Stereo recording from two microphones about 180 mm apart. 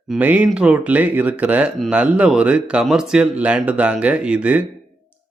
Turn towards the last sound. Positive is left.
turn(degrees=-5)  # may be behind; listen again after turning